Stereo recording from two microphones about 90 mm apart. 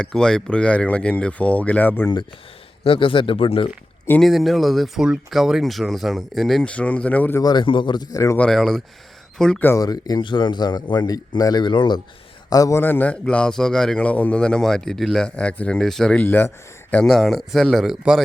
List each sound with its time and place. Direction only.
0.0 s a man's voice: 10° left (ahead or behind)
2.8 s speech: 80° left
4.2 s speech: centre (ahead or behind)
6.7 s a man's voice: 15° left (ahead or behind)
7.4 s a man's voice: 60° left (ahead or behind)
8.1 s a man's voice: 35° left (ahead or behind)
8.4 s a man's voice: 5° left (ahead or behind)
9.7 s speech: 45° left (ahead or behind)
10.2 s a man's voice: 60° left (ahead or behind)
12.5 s a man's voice: 40° left (ahead or behind)
12.8 s a man's voice: 20° left (ahead or behind)
16.2 s speech: 20° left (ahead or behind)
17.1 s speech: centre (ahead or behind)